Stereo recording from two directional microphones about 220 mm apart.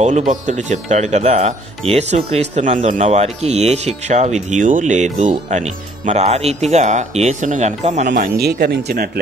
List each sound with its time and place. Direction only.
0.3 s speech: 35° right (ahead or behind)
8.2 s speech: 45° right (ahead or behind)